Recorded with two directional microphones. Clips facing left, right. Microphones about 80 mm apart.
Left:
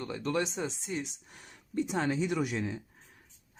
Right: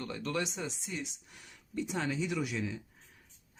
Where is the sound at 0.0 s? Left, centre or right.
Left.